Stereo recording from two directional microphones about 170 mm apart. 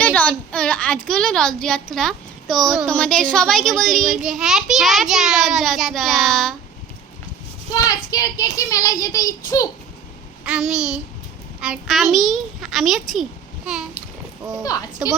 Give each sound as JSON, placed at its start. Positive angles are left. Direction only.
{"t": 0.0, "sound": "a sound", "side_deg": 10}
{"t": 1.0, "sound": "a child's voice", "side_deg": 5}
{"t": 7.7, "sound": "a child's voice", "side_deg": 20}
{"t": 10.4, "sound": "a child's voice", "side_deg": -5}
{"t": 14.6, "sound": "a child's voice", "side_deg": 20}